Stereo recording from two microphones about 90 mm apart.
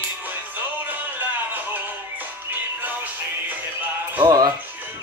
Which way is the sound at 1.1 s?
20° right (ahead or behind).